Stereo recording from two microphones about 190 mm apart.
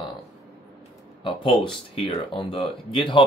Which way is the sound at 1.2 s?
25° left (ahead or behind).